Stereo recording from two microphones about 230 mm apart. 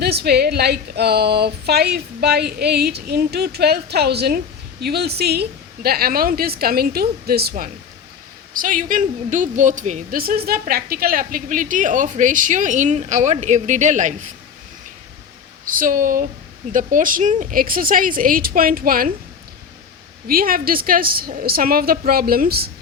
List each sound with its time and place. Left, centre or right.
0.0 s speech: right
15.6 s speech: right
20.2 s speech: right